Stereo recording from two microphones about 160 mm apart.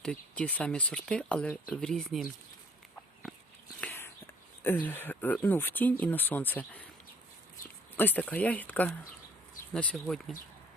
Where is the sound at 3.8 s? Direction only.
15° left (ahead or behind).